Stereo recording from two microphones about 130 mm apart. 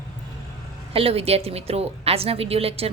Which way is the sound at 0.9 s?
50° right (ahead or behind).